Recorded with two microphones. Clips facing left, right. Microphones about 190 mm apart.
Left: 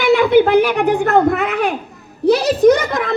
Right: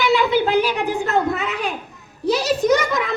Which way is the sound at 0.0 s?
55° left (ahead or behind).